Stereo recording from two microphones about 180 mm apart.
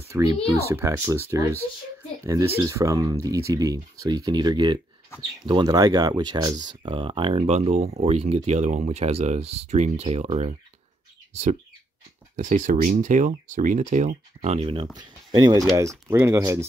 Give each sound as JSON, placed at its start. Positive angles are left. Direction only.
{"t": 0.1, "sound": "speech", "side_deg": -15}
{"t": 12.4, "sound": "speech", "side_deg": -45}